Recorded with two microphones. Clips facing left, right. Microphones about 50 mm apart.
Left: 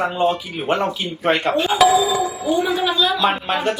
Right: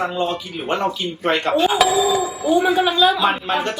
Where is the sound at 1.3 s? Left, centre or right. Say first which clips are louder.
Right 1 dB; centre.